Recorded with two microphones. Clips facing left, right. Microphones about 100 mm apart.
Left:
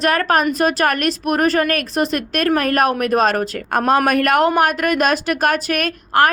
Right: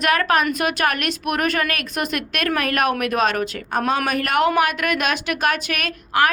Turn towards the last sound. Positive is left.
turn(degrees=45)  # may be behind; listen again after turning